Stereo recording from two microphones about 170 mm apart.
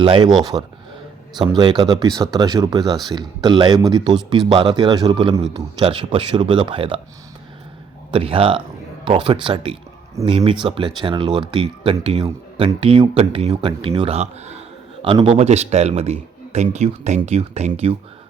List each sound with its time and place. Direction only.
0.0 s speech: 30° right (ahead or behind)
8.1 s speech: 30° right (ahead or behind)